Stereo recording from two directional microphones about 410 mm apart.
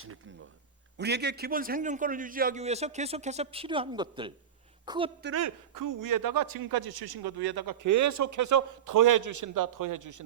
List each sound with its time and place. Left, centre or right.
0.9 s a man's voice: right
5.2 s a man's voice: right